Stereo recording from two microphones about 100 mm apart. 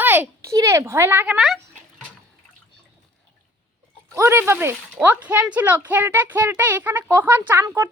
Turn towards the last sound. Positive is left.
turn(degrees=-20)  # may be behind; listen again after turning